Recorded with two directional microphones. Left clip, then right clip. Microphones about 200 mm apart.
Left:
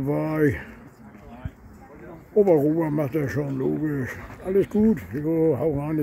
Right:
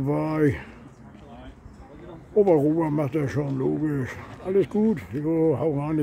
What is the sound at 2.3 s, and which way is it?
Speech, 5° left (ahead or behind).